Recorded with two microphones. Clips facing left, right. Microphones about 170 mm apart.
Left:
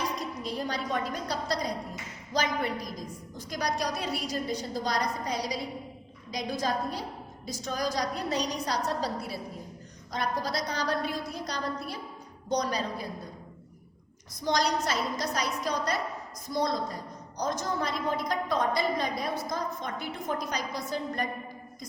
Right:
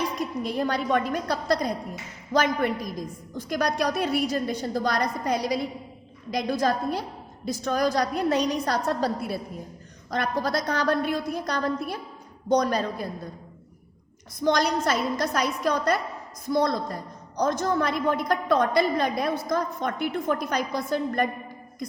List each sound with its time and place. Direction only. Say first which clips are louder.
0.4 s a woman's voice: right 7 dB; 60° right (ahead or behind)
14.4 s a woman's voice: right 5 dB; 55° right (ahead or behind)